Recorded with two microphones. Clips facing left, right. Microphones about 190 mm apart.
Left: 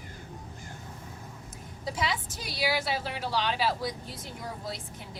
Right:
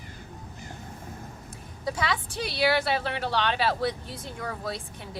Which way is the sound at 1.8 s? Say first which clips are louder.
Right 3 dB; 65° right (ahead or behind).